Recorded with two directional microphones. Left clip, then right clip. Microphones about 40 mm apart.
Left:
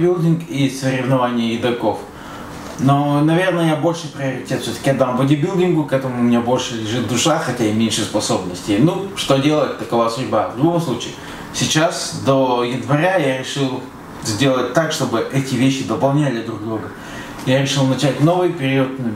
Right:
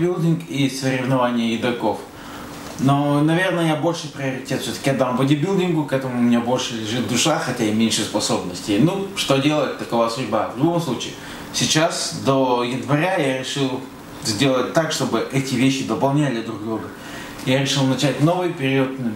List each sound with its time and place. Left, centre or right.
0.0 s speech: right
2.9 s speech: right
17.5 s speech: right